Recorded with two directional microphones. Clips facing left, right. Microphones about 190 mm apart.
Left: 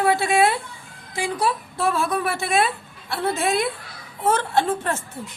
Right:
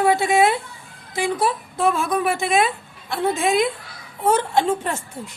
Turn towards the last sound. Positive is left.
turn(degrees=-15)  # may be behind; listen again after turning